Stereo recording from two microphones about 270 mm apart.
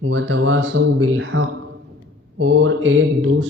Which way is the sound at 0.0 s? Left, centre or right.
Right.